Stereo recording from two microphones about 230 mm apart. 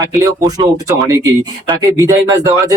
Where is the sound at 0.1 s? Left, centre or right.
Centre.